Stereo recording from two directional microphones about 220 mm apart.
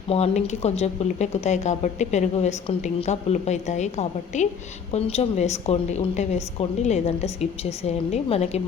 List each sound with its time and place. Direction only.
0.1 s a woman's voice: 30° left (ahead or behind)